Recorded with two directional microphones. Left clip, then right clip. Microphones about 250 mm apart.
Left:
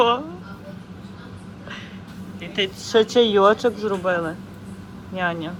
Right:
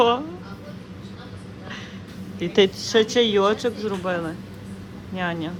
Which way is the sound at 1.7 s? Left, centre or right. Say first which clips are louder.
Even; centre.